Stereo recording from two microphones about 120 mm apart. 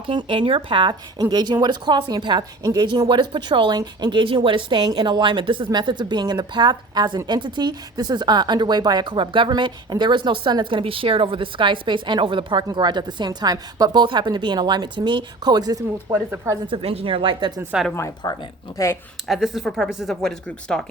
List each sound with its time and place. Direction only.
0.1 s speech: 45° right (ahead or behind)
16.1 s speech: 20° right (ahead or behind)
16.6 s speech: 55° right (ahead or behind)
17.7 s a woman's voice: 5° right (ahead or behind)
18.2 s speech: 35° left (ahead or behind)
19.3 s speech: centre (ahead or behind)